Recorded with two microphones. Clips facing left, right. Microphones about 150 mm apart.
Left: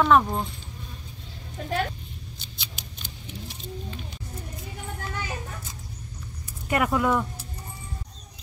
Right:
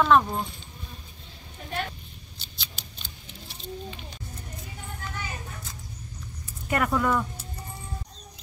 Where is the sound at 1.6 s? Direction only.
90° left.